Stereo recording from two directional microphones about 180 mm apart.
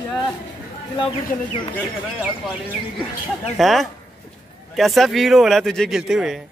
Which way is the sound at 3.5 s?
Centre (ahead or behind).